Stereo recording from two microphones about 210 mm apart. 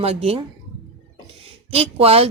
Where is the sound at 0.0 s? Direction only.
30° right (ahead or behind).